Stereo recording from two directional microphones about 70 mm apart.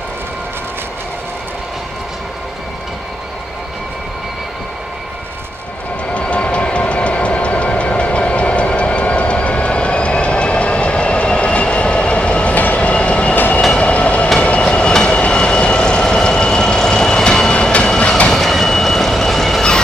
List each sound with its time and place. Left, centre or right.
6.1 s train: centre
18.3 s train: centre